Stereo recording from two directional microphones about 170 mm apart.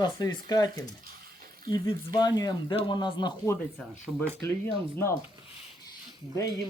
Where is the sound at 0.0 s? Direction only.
25° left (ahead or behind).